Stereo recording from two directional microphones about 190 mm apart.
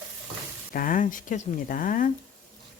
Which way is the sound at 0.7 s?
45° left (ahead or behind).